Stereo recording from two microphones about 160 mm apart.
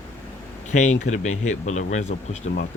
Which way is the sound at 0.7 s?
50° left (ahead or behind).